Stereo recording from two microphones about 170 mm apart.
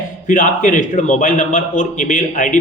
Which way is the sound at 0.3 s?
50° left (ahead or behind).